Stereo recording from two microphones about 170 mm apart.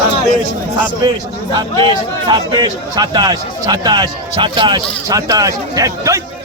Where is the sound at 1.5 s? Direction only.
25° right (ahead or behind).